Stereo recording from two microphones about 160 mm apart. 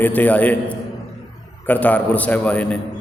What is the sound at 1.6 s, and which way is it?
A man's voice, 10° left (ahead or behind).